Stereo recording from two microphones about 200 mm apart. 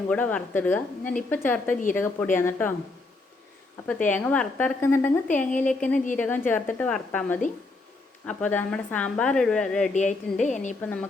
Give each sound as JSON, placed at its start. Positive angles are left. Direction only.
{"t": 0.1, "sound": "a woman's voice", "side_deg": 5}
{"t": 3.8, "sound": "a woman's voice", "side_deg": 10}
{"t": 5.5, "sound": "a woman's voice", "side_deg": 40}
{"t": 6.1, "sound": "a woman's voice", "side_deg": 10}
{"t": 9.9, "sound": "a woman's voice", "side_deg": 35}